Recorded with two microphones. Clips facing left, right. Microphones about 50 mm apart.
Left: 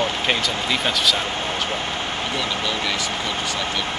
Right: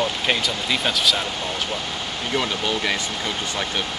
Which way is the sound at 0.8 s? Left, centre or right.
Centre.